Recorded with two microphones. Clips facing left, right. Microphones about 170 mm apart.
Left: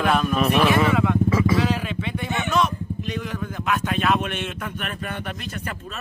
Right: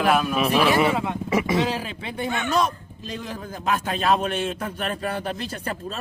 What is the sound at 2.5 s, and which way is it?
Speech, 35° right (ahead or behind).